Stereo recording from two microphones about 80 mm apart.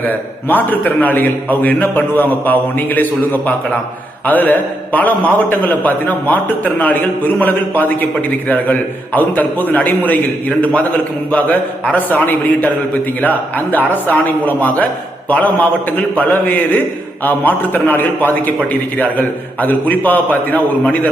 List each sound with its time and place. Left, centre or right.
0.1 s a man's voice: left
11.9 s a man's voice: left